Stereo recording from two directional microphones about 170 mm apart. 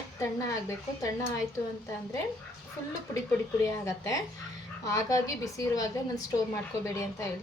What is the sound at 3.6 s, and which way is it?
A woman's voice, 20° left (ahead or behind).